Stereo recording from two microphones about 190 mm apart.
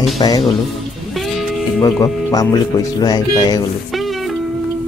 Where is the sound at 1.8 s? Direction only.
20° left (ahead or behind).